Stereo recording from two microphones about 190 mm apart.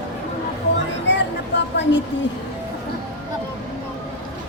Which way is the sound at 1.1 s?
65° left (ahead or behind).